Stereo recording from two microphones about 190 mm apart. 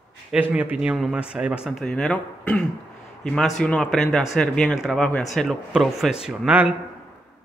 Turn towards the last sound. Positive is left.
turn(degrees=-5)  # may be behind; listen again after turning